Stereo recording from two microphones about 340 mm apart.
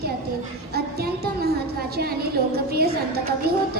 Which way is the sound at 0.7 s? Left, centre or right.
Right.